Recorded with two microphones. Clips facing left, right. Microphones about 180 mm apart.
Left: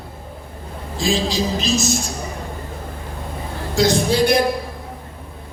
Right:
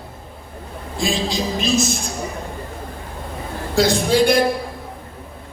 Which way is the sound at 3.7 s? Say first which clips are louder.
Right 1 dB; 55° right (ahead or behind).